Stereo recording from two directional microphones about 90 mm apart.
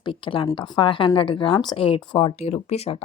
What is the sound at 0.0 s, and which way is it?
Speech, 70° left (ahead or behind).